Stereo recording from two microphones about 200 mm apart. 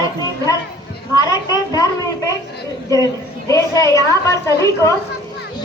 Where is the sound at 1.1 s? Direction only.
20° left (ahead or behind).